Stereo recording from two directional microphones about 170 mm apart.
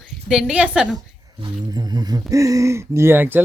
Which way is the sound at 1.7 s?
25° right (ahead or behind).